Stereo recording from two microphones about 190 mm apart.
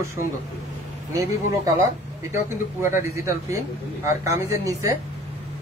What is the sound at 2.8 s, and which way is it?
Speech, 15° right (ahead or behind).